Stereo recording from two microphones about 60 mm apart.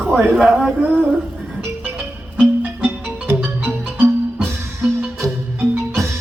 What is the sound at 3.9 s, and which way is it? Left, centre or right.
Music, right.